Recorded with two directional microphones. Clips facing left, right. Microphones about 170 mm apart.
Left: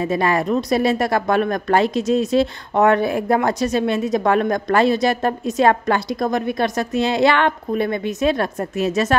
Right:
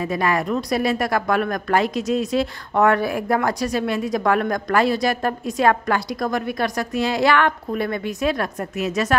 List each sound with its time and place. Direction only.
0.0 s speech: 25° left (ahead or behind)